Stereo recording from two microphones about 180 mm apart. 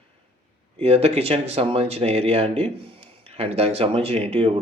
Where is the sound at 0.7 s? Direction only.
35° right (ahead or behind).